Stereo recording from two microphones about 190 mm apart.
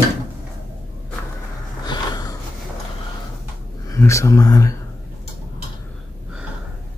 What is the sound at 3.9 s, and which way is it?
Speech, 15° left (ahead or behind).